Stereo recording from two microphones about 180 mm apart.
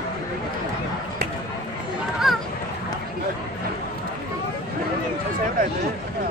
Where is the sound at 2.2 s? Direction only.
Centre (ahead or behind).